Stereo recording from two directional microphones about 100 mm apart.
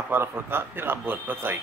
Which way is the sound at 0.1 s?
25° right (ahead or behind).